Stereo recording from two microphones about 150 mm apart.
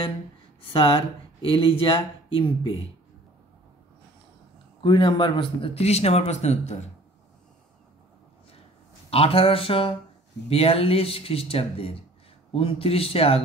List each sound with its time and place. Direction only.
0.6 s speech: 35° left (ahead or behind)
4.8 s speech: 30° left (ahead or behind); by 6.9 s 50° left (ahead or behind)
9.1 s speech: 40° left (ahead or behind)